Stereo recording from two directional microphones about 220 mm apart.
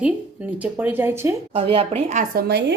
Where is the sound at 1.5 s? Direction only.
25° right (ahead or behind); by 2.6 s 45° right (ahead or behind).